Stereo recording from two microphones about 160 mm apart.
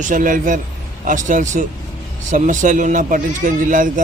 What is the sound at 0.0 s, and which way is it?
A man's voice, 55° right (ahead or behind).